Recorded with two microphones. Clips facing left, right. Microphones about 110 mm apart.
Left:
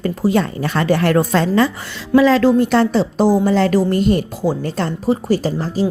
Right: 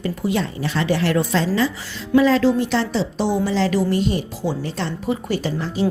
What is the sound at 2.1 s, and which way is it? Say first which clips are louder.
Speech: left 3 dB; 90° left.